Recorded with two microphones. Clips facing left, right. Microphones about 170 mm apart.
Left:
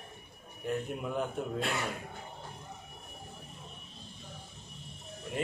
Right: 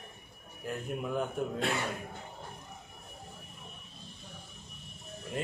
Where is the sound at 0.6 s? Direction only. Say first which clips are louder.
Left 2 dB; centre (ahead or behind).